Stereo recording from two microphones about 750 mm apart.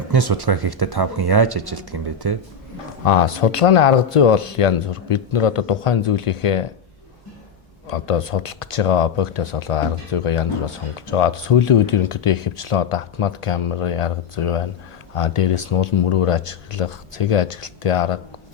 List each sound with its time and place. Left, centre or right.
0.1 s speech: right
3.1 s speech: left
7.9 s speech: left